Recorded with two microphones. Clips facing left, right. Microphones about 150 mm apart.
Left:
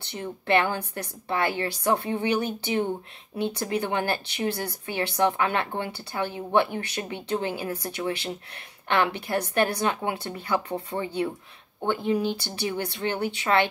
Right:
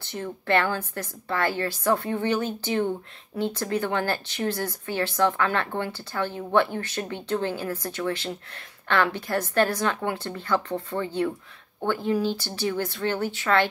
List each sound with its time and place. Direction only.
0.0 s speech: 20° left (ahead or behind)